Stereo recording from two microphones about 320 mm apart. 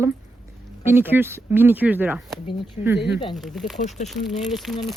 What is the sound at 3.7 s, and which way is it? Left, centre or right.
Speech, left.